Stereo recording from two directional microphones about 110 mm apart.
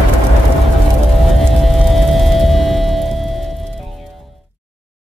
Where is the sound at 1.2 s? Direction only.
Centre (ahead or behind).